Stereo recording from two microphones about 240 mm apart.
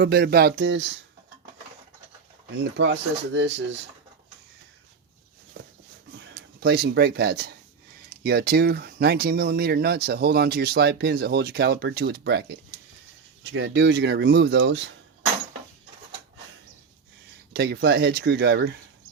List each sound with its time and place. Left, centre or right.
0.0 s speech: right
2.6 s speech: right
6.6 s speech: right
17.5 s speech: right